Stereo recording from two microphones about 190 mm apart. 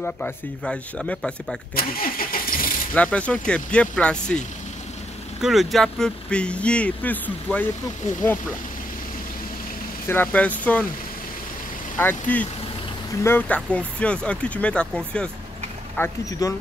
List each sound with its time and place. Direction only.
0.0 s speech: 5° left (ahead or behind)
1.8 s vehicle: 50° left (ahead or behind)
2.9 s speech: 5° left (ahead or behind)
5.4 s speech: centre (ahead or behind)
10.0 s speech: 10° left (ahead or behind)
12.0 s speech: 10° left (ahead or behind)
16.0 s speech: 15° left (ahead or behind)